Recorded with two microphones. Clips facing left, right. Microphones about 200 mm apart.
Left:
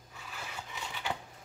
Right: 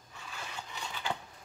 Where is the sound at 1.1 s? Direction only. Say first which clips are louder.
Right 1 dB; 5° left (ahead or behind).